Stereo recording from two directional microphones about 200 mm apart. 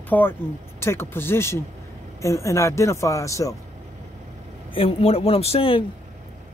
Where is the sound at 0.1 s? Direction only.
10° left (ahead or behind).